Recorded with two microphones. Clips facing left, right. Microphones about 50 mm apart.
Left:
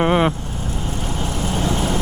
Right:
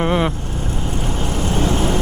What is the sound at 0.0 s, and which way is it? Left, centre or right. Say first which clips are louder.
Vehicle: left 2 dB; centre.